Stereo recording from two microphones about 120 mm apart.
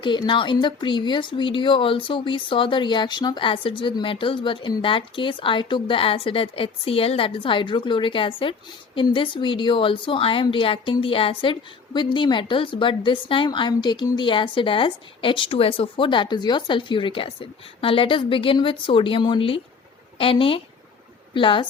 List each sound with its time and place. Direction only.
0.0 s speech: 40° left (ahead or behind)